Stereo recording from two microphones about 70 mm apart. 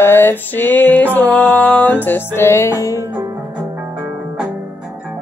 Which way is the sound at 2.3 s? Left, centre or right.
Left.